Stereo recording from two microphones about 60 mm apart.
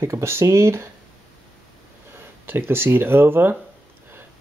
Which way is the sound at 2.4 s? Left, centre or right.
Right.